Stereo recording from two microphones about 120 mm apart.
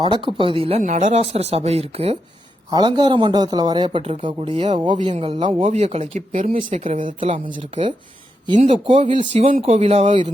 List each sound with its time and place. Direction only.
0.0 s a woman's voice: 45° right (ahead or behind)
0.8 s speech: 90° right; by 2.1 s 60° right (ahead or behind)
2.6 s speech: 35° right (ahead or behind); by 4.8 s 55° right (ahead or behind)
4.8 s speech: 40° right (ahead or behind); by 6.5 s 90° right
6.7 s speech: 80° right
7.2 s a woman's voice: 50° right (ahead or behind)
8.6 s a woman's voice: 50° right (ahead or behind)
9.3 s speech: 75° right (ahead or behind)